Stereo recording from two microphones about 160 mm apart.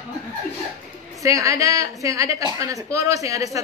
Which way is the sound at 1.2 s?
20° right (ahead or behind).